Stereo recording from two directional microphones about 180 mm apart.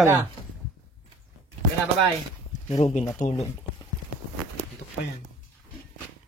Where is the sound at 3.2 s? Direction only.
45° left (ahead or behind).